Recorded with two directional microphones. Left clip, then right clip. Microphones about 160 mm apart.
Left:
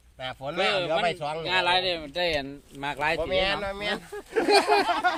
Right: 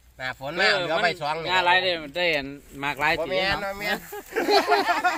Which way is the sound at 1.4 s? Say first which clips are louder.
Right 3 dB; 35° right (ahead or behind).